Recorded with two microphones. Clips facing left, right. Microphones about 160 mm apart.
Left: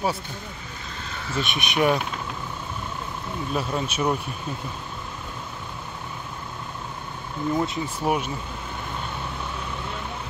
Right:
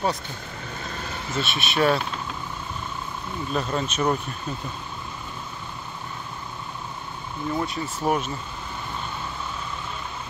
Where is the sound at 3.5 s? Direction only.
10° left (ahead or behind).